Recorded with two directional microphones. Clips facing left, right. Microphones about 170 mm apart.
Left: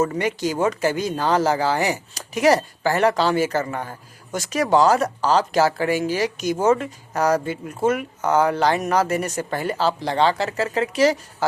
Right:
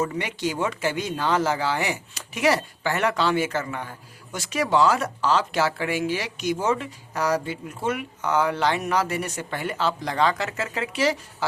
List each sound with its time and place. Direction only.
0.0 s speech: 45° left (ahead or behind)